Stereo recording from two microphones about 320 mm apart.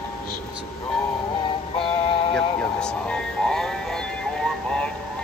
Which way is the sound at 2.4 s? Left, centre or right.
Centre.